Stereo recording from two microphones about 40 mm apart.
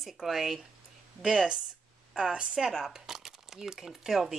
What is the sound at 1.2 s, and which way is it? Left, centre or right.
A woman's voice, right.